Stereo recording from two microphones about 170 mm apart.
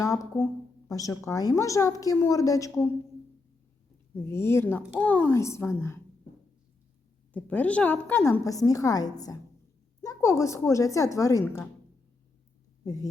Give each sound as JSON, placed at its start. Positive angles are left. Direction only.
{"t": 0.0, "sound": "a woman's voice", "side_deg": 20}
{"t": 4.3, "sound": "a woman's voice", "side_deg": 15}
{"t": 7.3, "sound": "a woman's voice", "side_deg": 10}
{"t": 12.8, "sound": "speech", "side_deg": 20}